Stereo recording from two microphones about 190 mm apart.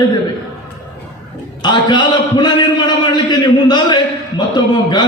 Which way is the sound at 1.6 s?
25° left (ahead or behind).